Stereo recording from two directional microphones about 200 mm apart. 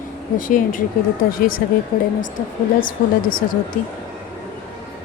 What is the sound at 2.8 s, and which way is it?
Speech, 45° left (ahead or behind).